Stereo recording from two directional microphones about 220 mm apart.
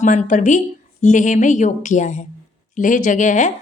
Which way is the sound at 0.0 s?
35° left (ahead or behind).